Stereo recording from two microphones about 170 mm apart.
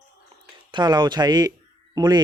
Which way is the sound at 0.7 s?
25° right (ahead or behind).